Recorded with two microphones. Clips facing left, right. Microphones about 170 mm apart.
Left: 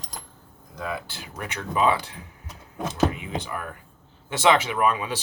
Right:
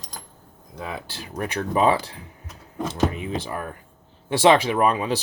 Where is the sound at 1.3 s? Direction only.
35° right (ahead or behind).